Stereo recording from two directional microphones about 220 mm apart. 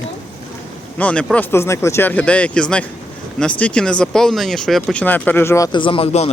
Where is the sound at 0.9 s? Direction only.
5° left (ahead or behind).